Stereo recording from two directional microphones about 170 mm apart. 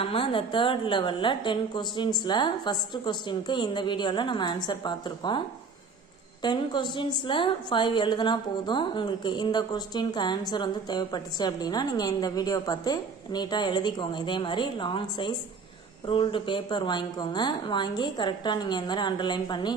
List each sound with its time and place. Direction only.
0.0 s a woman's voice: 30° left (ahead or behind)
6.4 s a woman's voice: 25° left (ahead or behind)